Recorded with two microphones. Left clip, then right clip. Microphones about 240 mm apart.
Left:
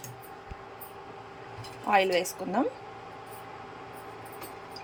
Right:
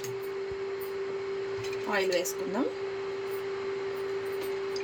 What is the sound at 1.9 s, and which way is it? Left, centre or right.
Speech, centre.